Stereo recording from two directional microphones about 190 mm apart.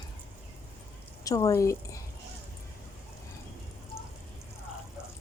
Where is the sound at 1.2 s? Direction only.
20° left (ahead or behind).